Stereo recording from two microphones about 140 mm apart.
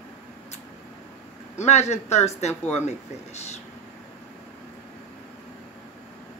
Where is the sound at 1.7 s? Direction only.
50° left (ahead or behind).